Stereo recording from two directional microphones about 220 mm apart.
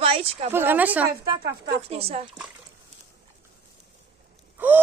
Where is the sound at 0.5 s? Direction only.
10° right (ahead or behind).